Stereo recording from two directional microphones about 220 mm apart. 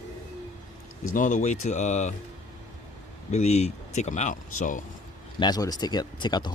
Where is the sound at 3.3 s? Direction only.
30° left (ahead or behind).